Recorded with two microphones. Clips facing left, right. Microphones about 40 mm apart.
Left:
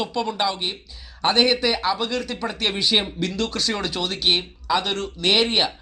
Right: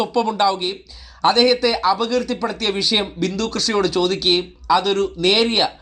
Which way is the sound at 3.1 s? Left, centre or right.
Left.